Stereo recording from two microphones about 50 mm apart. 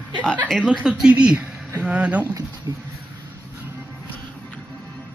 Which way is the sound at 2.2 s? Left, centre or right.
Right.